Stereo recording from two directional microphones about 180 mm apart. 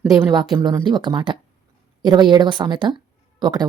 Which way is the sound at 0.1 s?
20° right (ahead or behind).